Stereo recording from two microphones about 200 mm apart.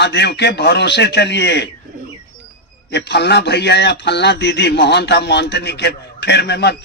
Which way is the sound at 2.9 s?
60° left (ahead or behind).